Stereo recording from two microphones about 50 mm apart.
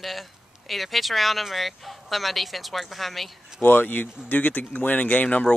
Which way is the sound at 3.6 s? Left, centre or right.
Left.